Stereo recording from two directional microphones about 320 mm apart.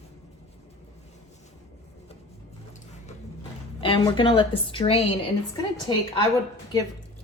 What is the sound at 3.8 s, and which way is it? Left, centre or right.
A woman's voice, centre.